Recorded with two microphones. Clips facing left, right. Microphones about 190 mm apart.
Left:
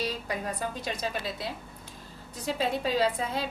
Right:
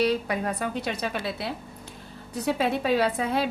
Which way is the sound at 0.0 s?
65° right (ahead or behind).